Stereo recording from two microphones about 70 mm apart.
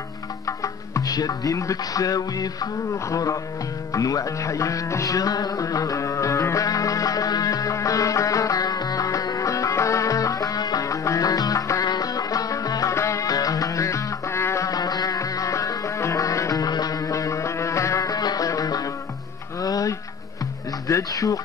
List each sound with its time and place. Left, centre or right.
0.5 s music: left
12.9 s music: left
14.7 s music: left